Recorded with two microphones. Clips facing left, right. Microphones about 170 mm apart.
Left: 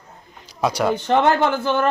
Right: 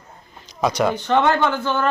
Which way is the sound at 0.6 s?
5° left (ahead or behind).